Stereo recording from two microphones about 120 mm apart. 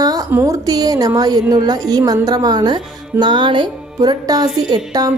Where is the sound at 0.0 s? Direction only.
30° right (ahead or behind).